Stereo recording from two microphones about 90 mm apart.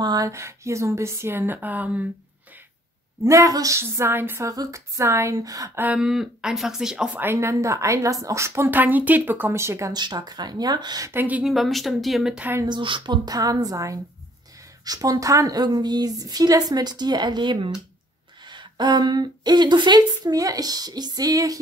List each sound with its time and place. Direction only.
0.0 s speech: 45° right (ahead or behind)
0.3 s a woman's voice: 30° right (ahead or behind)
3.3 s a woman's voice: 40° right (ahead or behind)
4.5 s a woman's voice: 40° right (ahead or behind)
5.9 s speech: 5° right (ahead or behind)
7.2 s a woman's voice: 25° right (ahead or behind)
9.9 s a woman's voice: 50° right (ahead or behind)
11.1 s a woman's voice: 20° right (ahead or behind)
11.4 s speech: centre (ahead or behind)
12.4 s a woman's voice: 20° right (ahead or behind)
12.6 s a woman's voice: 60° right (ahead or behind)
20.3 s a woman's voice: 40° right (ahead or behind)